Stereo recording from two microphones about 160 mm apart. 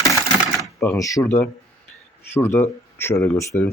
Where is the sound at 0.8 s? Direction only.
15° left (ahead or behind).